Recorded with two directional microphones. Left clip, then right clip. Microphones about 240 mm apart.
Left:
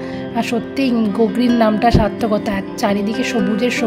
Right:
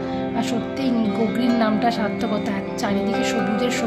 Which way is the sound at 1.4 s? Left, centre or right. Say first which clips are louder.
Left 5 dB; left.